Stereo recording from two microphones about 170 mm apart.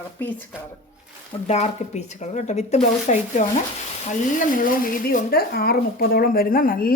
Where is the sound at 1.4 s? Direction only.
40° left (ahead or behind).